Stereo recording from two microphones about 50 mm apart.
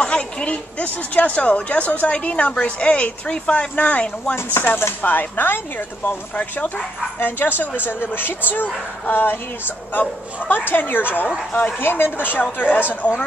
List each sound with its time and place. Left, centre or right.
0.0 s speech: left
4.6 s a woman's voice: left
7.2 s a woman's voice: left
10.5 s a woman's voice: left
11.8 s a woman's voice: left